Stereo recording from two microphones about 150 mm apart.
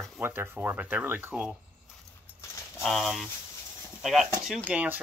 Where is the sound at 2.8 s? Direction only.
Centre (ahead or behind).